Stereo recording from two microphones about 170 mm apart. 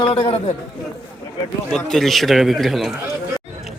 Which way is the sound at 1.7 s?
Centre (ahead or behind).